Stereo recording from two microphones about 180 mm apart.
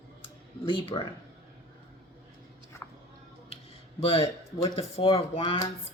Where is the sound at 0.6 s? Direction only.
30° left (ahead or behind).